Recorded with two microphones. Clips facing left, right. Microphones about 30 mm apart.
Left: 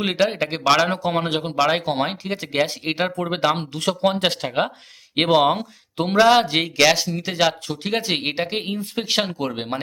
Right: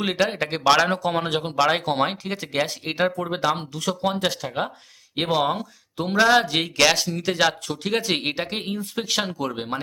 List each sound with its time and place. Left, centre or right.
0.0 s speech: centre
3.2 s speech: left
3.7 s speech: left
4.0 s speech: left
6.1 s speech: centre